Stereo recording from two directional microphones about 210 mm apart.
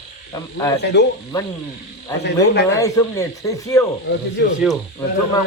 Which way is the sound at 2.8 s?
15° left (ahead or behind).